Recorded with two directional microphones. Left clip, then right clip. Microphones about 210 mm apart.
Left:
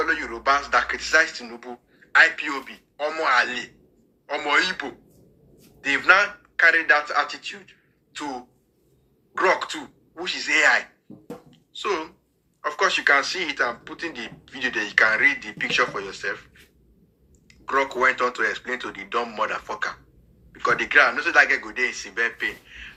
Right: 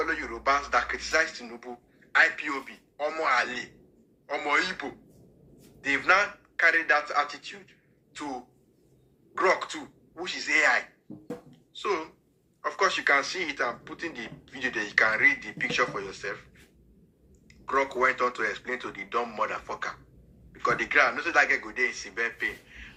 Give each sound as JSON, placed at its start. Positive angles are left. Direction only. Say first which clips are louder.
{"t": 0.0, "sound": "a man's voice", "louder": "left 5 dB", "side_deg": 15}
{"t": 11.5, "sound": "a sound", "louder": "left 4 dB", "side_deg": 15}
{"t": 12.6, "sound": "speech", "louder": "left 5 dB", "side_deg": 15}
{"t": 17.5, "sound": "speech", "louder": "left 4 dB", "side_deg": 15}